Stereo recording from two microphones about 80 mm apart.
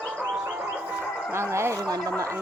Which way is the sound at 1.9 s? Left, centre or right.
Right.